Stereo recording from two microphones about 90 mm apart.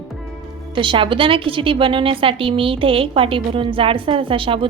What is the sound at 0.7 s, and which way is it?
A woman's voice, 65° right (ahead or behind).